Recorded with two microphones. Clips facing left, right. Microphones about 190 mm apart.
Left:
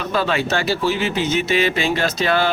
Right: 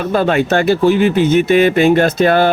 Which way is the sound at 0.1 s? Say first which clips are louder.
Right 6 dB; 50° right (ahead or behind).